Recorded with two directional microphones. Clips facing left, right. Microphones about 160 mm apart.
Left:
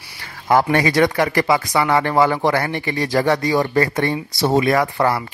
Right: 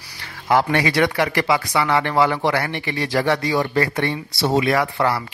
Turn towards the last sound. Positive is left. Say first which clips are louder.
# left 2 dB
turn(degrees=40)  # may be behind; listen again after turning